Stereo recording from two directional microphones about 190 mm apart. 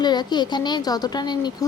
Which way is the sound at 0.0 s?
20° left (ahead or behind).